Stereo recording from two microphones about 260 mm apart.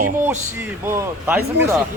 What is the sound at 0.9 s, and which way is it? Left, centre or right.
Speech, centre.